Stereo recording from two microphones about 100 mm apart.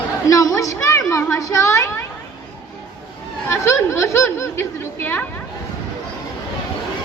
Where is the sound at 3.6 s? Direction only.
30° left (ahead or behind).